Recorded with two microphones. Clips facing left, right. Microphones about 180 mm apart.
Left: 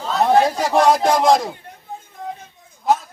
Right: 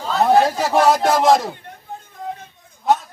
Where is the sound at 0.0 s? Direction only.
Centre (ahead or behind).